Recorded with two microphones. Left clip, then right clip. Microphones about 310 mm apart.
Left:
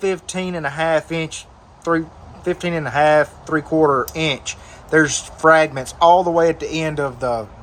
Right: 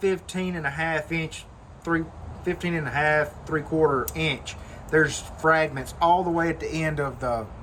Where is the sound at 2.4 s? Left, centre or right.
Centre.